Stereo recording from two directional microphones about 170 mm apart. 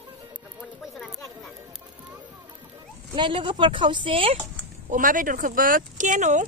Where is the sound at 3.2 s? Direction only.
30° right (ahead or behind).